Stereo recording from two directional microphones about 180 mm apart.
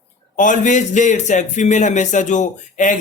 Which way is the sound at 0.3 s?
45° left (ahead or behind).